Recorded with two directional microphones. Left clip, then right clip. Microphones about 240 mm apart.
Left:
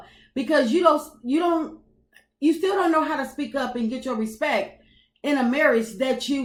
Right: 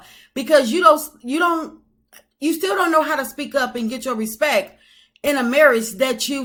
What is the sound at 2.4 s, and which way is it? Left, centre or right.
Speech, right.